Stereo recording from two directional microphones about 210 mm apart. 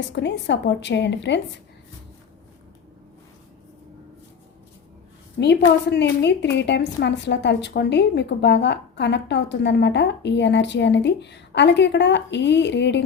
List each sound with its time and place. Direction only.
0.2 s a woman's voice: 55° left (ahead or behind)
5.4 s a woman's voice: 55° left (ahead or behind)